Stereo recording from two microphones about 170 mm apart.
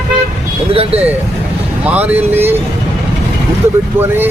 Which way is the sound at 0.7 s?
35° right (ahead or behind).